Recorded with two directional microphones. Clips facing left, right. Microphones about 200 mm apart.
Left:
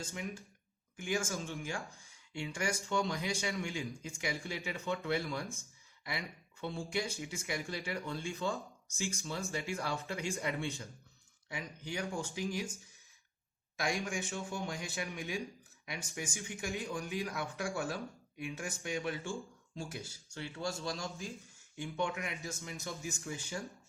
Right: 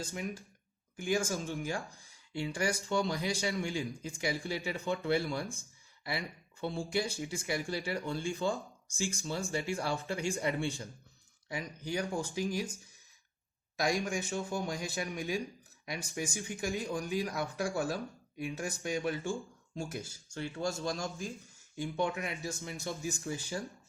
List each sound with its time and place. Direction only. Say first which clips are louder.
0.0 s speech: right 3 dB; 35° right (ahead or behind)
13.7 s speech: right 4 dB; 40° right (ahead or behind)
21.8 s speech: right 3 dB; 35° right (ahead or behind)